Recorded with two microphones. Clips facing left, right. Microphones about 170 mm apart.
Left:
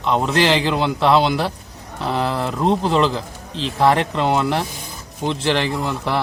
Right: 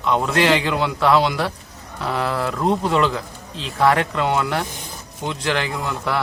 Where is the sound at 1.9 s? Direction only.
30° left (ahead or behind).